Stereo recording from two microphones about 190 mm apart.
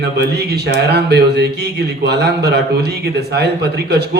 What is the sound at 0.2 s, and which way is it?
A man's voice, 60° right (ahead or behind).